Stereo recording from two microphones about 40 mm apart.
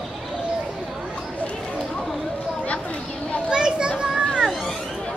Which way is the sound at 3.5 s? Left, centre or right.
Right.